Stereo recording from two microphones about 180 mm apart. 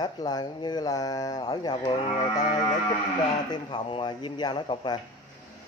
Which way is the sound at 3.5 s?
25° left (ahead or behind).